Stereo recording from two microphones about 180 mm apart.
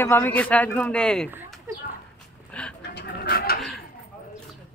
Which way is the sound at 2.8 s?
65° left (ahead or behind).